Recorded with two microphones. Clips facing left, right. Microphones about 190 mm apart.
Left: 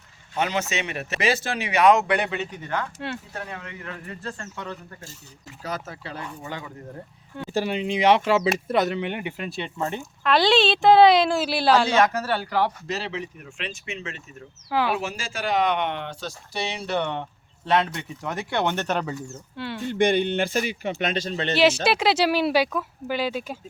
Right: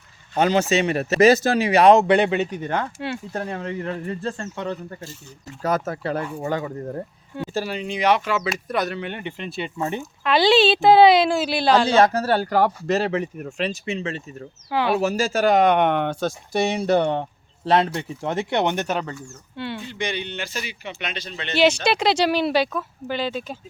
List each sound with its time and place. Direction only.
0.3 s speech: 35° right (ahead or behind)
3.0 s speech: 5° right (ahead or behind)
3.3 s speech: 40° right (ahead or behind)
5.6 s speech: 50° right (ahead or behind)
7.5 s speech: 20° left (ahead or behind)
9.5 s speech: 5° right (ahead or behind)
11.9 s speech: 35° right (ahead or behind)
14.7 s speech: 5° left (ahead or behind)
14.9 s speech: 40° right (ahead or behind); by 18.9 s 15° right (ahead or behind)
19.5 s speech: centre (ahead or behind)
19.8 s speech: 55° left (ahead or behind)
21.5 s speech: centre (ahead or behind)